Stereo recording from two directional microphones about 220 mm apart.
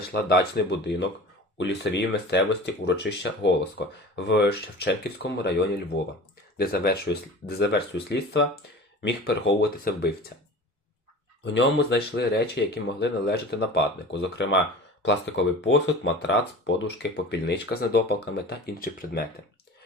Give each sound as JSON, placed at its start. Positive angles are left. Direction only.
{"t": 0.1, "sound": "speech", "side_deg": 50}
{"t": 11.4, "sound": "speech", "side_deg": 55}